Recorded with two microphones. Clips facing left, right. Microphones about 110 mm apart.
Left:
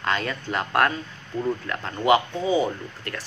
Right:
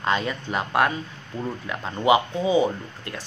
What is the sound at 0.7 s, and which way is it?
Speech, 10° right (ahead or behind).